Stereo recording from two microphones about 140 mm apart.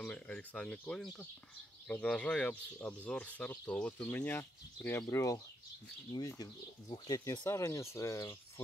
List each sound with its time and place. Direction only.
0.0 s speech: 10° left (ahead or behind)